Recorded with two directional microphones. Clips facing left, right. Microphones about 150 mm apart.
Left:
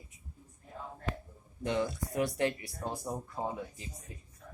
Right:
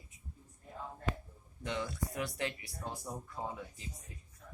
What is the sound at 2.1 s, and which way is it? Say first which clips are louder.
Speech: left 9 dB; 45° left (ahead or behind).